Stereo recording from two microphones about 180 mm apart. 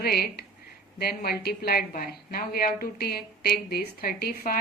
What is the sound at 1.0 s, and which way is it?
A woman's voice, 60° left (ahead or behind).